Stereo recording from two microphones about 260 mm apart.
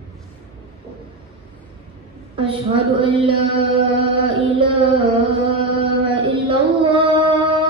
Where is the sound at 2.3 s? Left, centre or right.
Centre.